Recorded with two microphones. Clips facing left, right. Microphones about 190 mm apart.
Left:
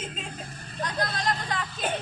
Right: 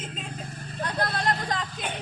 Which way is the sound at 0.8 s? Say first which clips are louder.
Right 1 dB; 55° right (ahead or behind).